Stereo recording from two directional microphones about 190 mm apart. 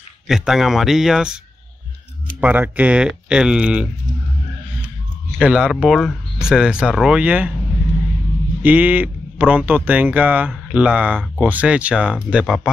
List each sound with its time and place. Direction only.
0.3 s speech: centre (ahead or behind)
2.4 s speech: 10° right (ahead or behind)
5.4 s speech: 5° right (ahead or behind)
8.6 s speech: 10° right (ahead or behind)